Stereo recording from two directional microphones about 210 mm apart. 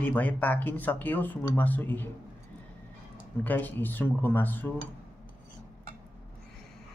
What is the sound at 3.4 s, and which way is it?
A man's voice, 10° left (ahead or behind).